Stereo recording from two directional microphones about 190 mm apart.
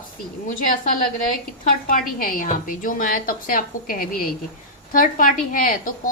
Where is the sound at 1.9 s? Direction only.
45° left (ahead or behind).